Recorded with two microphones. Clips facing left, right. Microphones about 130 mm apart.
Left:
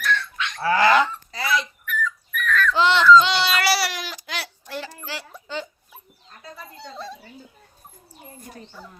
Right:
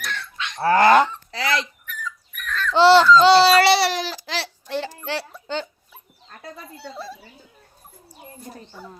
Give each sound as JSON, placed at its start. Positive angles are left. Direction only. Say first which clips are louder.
{"t": 0.0, "sound": "goose", "louder": "left 6 dB", "side_deg": -25}
{"t": 0.6, "sound": "honk", "louder": "right 3 dB", "side_deg": -50}
{"t": 1.4, "sound": "dog", "louder": "right 1 dB", "side_deg": -85}
{"t": 1.9, "sound": "babbling", "louder": "left 7 dB", "side_deg": -35}
{"t": 6.6, "sound": "a sound", "louder": "even", "side_deg": -5}